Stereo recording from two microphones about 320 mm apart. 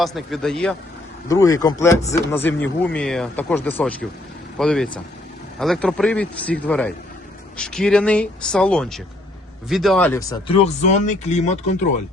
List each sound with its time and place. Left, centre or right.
0.0 s a man's voice: centre; by 11.7 s left